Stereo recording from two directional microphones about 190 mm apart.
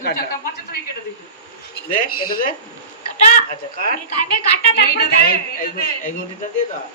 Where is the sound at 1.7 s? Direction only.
50° left (ahead or behind).